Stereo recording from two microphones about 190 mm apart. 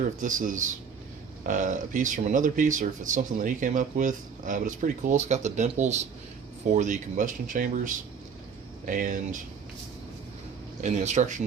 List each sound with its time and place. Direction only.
0.2 s speech: 45° right (ahead or behind)
10.8 s speech: 40° right (ahead or behind)